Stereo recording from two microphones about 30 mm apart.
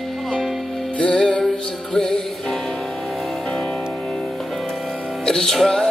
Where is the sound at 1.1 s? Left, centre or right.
Left.